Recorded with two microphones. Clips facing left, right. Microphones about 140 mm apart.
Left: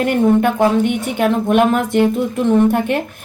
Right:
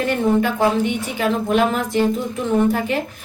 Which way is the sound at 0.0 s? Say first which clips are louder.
Left 4 dB; 60° left (ahead or behind).